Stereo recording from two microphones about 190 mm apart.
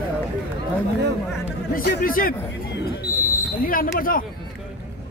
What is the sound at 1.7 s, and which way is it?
Speech, 50° left (ahead or behind).